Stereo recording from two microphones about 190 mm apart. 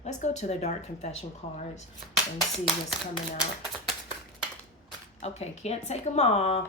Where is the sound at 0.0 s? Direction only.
40° left (ahead or behind).